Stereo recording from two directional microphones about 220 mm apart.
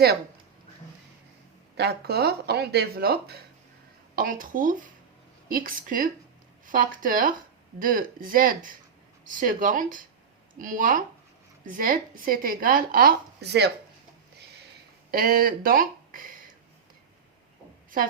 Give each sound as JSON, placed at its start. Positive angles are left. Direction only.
{"t": 1.7, "sound": "a woman's voice", "side_deg": -45}
{"t": 15.1, "sound": "speech", "side_deg": -40}